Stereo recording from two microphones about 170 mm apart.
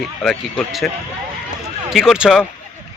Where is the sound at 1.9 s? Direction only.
Centre (ahead or behind).